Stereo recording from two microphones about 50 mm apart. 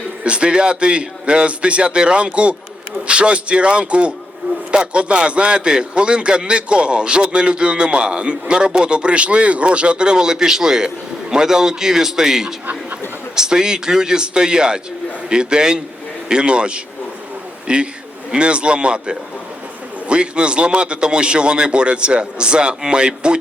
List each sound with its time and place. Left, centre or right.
0.3 s a man's voice: centre